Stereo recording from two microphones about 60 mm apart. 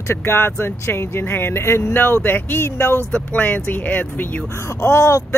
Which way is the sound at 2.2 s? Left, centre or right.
Left.